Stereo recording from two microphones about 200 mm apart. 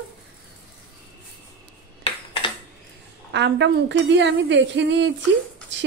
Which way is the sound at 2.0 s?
25° left (ahead or behind).